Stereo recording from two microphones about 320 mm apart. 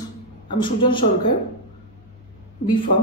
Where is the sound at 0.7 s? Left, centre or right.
Centre.